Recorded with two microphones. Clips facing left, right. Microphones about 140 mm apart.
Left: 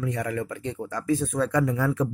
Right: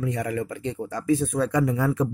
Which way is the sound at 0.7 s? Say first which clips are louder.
Right 3 dB; 15° right (ahead or behind).